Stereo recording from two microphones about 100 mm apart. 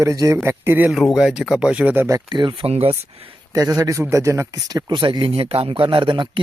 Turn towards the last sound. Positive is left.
turn(degrees=-55)  # may be behind; listen again after turning